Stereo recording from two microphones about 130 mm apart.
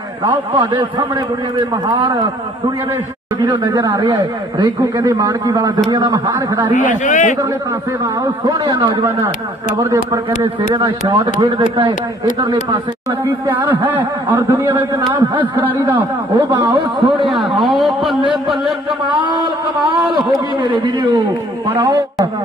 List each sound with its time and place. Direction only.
0.6 s a man's voice: 35° right (ahead or behind)
3.4 s a man's voice: 30° right (ahead or behind)
6.7 s a man's voice: 75° left (ahead or behind)
8.5 s a man's voice: 35° right (ahead or behind)
10.7 s a man's voice: 35° right (ahead or behind)
13.5 s a man's voice: 15° right (ahead or behind)
16.3 s a man's voice: 35° right (ahead or behind)
17.3 s a man's voice: centre (ahead or behind)
20.7 s a man's voice: 40° right (ahead or behind)
21.7 s a man's voice: 20° right (ahead or behind)